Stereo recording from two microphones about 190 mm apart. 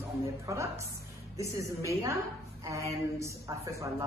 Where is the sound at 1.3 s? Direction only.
15° right (ahead or behind).